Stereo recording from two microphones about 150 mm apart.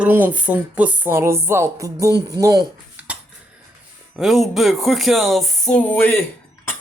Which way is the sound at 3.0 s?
10° right (ahead or behind).